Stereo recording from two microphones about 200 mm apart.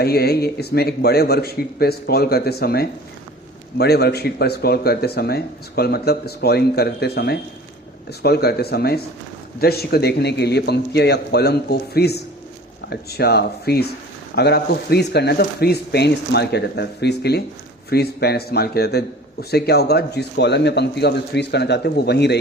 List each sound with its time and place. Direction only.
0.0 s a man's voice: 50° left (ahead or behind)